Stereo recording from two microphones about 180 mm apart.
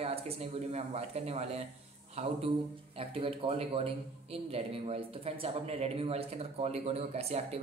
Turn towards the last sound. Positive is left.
turn(degrees=-35)  # may be behind; listen again after turning